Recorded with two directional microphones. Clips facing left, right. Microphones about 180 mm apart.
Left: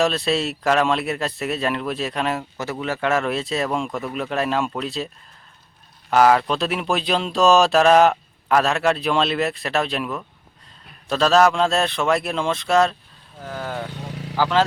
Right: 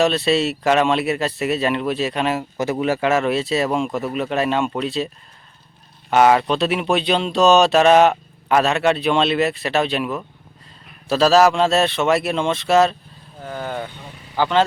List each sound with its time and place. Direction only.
0.0 s speech: centre (ahead or behind)
2.6 s speech: 15° right (ahead or behind)
3.0 s speech: 5° right (ahead or behind)
6.1 s speech: centre (ahead or behind)